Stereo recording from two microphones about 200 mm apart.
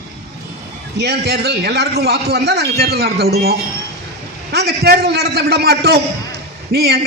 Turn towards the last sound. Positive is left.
turn(degrees=-55)  # may be behind; listen again after turning